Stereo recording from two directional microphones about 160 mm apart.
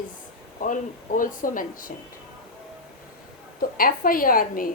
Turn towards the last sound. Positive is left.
turn(degrees=60)  # may be behind; listen again after turning